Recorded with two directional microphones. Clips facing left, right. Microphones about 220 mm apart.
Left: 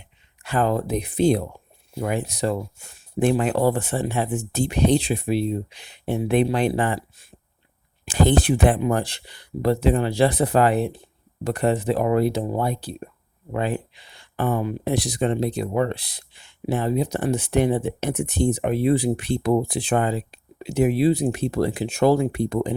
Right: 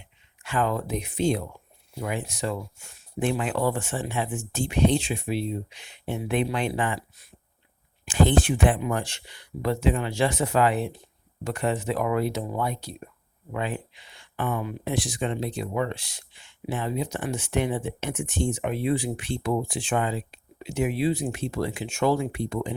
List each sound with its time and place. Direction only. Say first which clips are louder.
0.4 s speech: left 4 dB; 35° left (ahead or behind)